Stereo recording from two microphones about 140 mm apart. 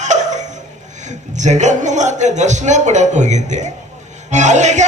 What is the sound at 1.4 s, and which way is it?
A man's voice, 60° right (ahead or behind).